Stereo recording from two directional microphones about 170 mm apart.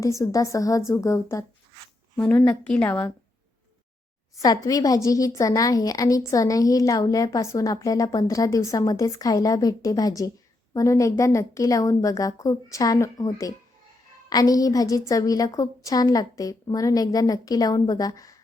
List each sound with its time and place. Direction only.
0.0 s a woman's voice: 20° left (ahead or behind)
4.4 s a woman's voice: 20° left (ahead or behind)